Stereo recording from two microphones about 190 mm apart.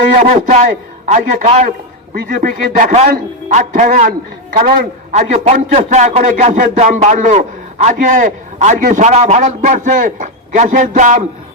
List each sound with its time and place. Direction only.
0.2 s a man's voice: 35° right (ahead or behind)